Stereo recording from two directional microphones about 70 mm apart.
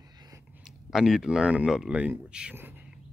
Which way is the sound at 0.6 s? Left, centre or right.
Centre.